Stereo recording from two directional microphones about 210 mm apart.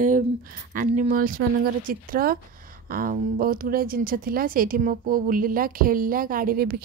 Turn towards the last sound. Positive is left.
turn(degrees=-45)  # may be behind; listen again after turning